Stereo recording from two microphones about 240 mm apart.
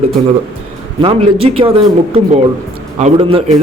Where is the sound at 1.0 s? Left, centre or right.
Right.